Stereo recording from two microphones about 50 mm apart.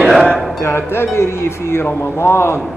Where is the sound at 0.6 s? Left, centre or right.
Left.